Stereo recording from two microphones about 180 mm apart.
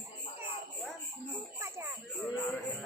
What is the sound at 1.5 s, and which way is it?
Speech, 15° right (ahead or behind).